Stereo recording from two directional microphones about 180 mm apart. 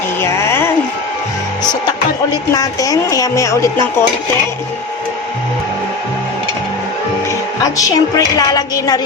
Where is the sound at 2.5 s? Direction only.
20° left (ahead or behind).